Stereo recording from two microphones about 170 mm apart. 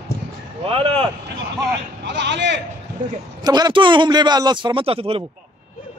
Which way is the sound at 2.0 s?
90° right.